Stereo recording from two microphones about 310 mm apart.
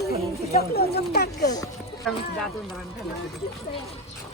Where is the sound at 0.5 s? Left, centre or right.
Left.